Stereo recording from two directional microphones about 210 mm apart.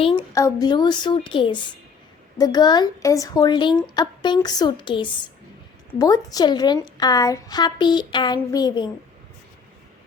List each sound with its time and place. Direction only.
0.0 s a woman's voice: 20° left (ahead or behind)